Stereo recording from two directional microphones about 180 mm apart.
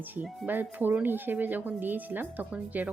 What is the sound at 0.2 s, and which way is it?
Speech, 10° right (ahead or behind).